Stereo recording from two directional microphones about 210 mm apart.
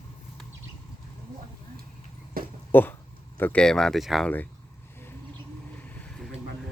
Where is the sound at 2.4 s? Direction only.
45° right (ahead or behind).